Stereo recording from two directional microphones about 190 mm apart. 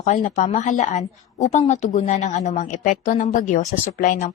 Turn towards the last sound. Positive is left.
turn(degrees=45)  # may be behind; listen again after turning